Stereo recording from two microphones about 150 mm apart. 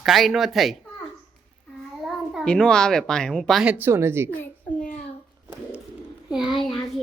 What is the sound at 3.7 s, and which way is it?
Speech, 15° right (ahead or behind).